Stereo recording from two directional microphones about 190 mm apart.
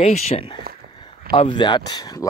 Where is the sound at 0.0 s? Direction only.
30° left (ahead or behind).